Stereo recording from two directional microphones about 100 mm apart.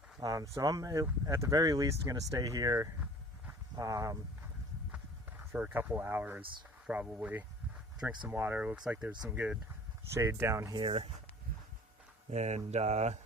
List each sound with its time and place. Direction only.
0.2 s speech: 35° right (ahead or behind)
5.5 s speech: 15° right (ahead or behind)
10.2 s speech: 25° right (ahead or behind)
10.8 s speech: 65° right (ahead or behind)
12.5 s speech: 90° right